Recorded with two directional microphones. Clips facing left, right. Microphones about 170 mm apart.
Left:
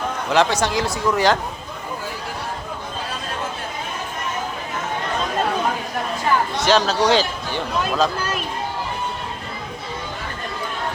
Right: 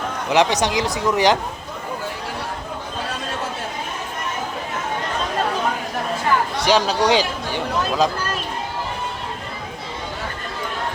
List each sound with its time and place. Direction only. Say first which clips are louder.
0.3 s speech: right 1 dB; 15° right (ahead or behind)
6.7 s speech: even; 15° right (ahead or behind)